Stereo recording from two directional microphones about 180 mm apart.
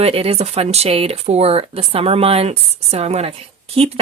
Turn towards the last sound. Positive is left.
turn(degrees=-35)  # may be behind; listen again after turning